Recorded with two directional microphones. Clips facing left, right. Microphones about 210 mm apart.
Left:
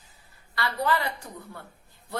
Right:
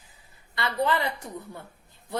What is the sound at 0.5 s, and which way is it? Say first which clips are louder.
A woman's voice: right 1 dB; 20° right (ahead or behind).